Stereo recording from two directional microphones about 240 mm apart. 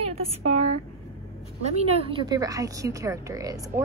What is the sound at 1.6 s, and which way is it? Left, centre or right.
Speech, right.